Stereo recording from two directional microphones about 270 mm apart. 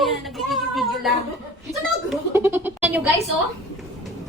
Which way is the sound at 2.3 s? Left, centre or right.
Centre.